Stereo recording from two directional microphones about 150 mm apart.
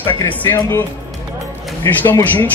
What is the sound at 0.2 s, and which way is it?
Speech, 15° left (ahead or behind).